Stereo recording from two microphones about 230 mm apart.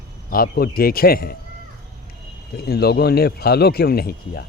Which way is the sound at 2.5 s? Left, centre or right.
Left.